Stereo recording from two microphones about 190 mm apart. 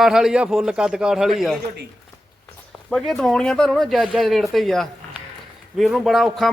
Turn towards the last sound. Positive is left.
turn(degrees=0)  # may be behind; listen again after turning